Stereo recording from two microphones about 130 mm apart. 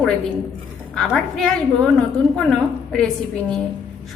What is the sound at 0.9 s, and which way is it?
A woman's voice, 5° left (ahead or behind).